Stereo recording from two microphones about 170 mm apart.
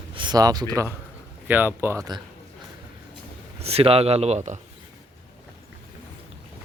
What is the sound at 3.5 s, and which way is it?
Speech, 35° right (ahead or behind).